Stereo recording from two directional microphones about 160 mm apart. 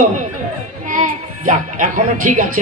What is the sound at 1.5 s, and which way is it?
Speech, 55° right (ahead or behind).